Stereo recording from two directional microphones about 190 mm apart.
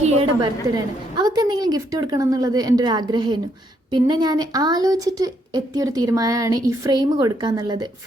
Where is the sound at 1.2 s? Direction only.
20° right (ahead or behind).